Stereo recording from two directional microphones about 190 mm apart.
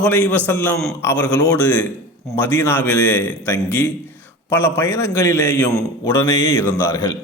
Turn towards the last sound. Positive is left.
turn(degrees=15)  # may be behind; listen again after turning